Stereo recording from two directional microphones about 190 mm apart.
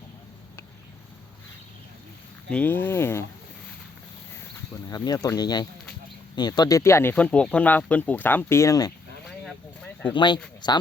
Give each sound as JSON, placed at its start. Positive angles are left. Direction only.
{"t": 2.5, "sound": "speech", "side_deg": 10}
{"t": 4.7, "sound": "speech", "side_deg": 20}
{"t": 9.4, "sound": "a sound", "side_deg": 5}
{"t": 10.2, "sound": "speech", "side_deg": 25}